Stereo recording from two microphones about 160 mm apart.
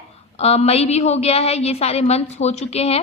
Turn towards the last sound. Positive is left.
turn(degrees=40)  # may be behind; listen again after turning